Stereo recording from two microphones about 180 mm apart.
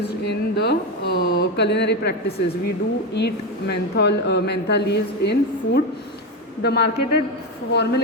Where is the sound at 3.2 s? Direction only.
65° left (ahead or behind).